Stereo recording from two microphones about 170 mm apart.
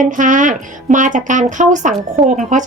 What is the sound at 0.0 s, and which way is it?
Speech, 50° right (ahead or behind).